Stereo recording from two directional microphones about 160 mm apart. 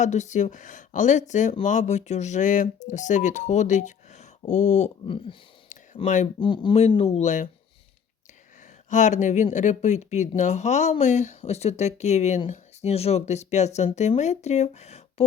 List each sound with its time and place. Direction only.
0.0 s speech: 45° left (ahead or behind)
5.0 s speech: 35° left (ahead or behind)
6.7 s speech: 40° left (ahead or behind)
8.9 s speech: 50° left (ahead or behind)